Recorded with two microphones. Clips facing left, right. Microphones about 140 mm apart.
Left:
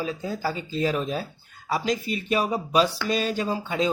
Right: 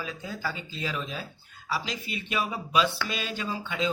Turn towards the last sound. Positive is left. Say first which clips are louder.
# left 6 dB
turn(degrees=40)  # may be behind; listen again after turning